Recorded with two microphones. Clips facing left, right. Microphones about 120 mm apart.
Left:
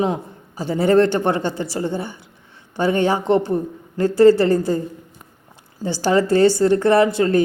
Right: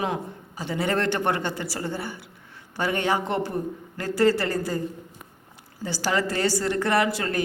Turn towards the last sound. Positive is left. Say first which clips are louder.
# left 8 dB
turn(degrees=30)  # may be behind; listen again after turning